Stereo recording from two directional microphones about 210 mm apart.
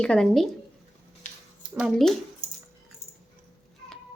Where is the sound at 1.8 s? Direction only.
Centre (ahead or behind).